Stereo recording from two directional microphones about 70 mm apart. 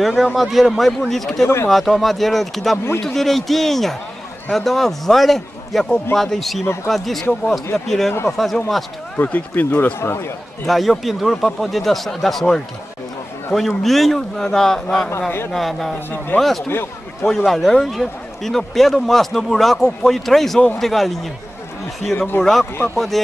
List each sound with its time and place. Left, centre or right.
0.0 s a man's voice: centre
9.1 s speech: left
9.9 s speech: left
10.7 s a man's voice: centre
16.6 s a man's voice: left
17.5 s a man's voice: centre
22.1 s speech: left
22.4 s a man's voice: centre